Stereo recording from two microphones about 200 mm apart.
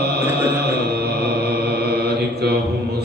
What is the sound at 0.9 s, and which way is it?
Mantra, 55° right (ahead or behind).